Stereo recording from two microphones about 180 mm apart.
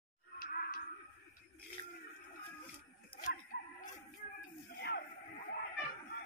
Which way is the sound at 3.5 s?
65° left (ahead or behind).